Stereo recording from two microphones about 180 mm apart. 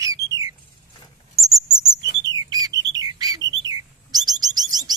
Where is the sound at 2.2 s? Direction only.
20° right (ahead or behind).